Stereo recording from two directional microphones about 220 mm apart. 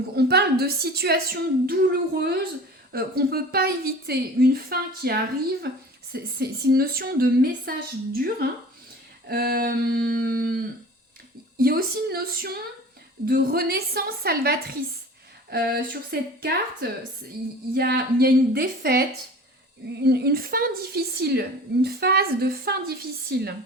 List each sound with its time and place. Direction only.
0.2 s a woman's voice: 45° right (ahead or behind)
20.1 s a woman's voice: 45° right (ahead or behind)